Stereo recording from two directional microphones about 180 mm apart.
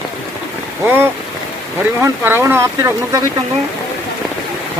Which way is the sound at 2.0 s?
15° right (ahead or behind).